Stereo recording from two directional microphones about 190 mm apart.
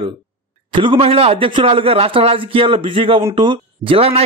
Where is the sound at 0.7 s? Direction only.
30° right (ahead or behind).